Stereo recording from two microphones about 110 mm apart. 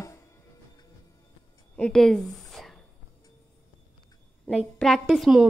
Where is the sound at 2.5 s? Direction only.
Centre (ahead or behind).